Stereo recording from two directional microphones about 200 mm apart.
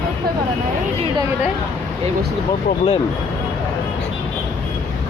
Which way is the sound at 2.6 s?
25° left (ahead or behind).